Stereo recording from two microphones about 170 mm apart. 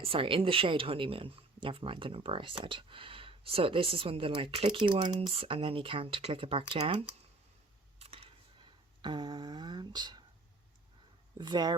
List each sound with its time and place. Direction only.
0.0 s speech: 35° right (ahead or behind)
7.9 s a sound: 35° right (ahead or behind)
9.0 s speech: 25° right (ahead or behind)
11.3 s speech: 25° right (ahead or behind)